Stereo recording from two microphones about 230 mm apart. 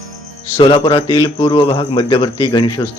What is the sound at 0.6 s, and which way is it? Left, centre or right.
Speech, left.